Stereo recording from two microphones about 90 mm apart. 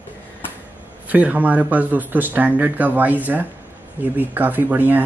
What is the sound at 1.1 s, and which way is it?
Speech, 15° right (ahead or behind).